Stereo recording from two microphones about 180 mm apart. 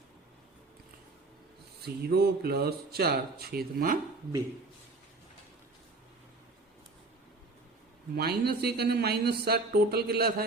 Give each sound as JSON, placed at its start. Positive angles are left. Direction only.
{"t": 1.8, "sound": "speech", "side_deg": -60}
{"t": 8.1, "sound": "speech", "side_deg": -60}